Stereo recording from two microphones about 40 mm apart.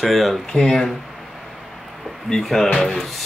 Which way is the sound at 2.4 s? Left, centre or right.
Centre.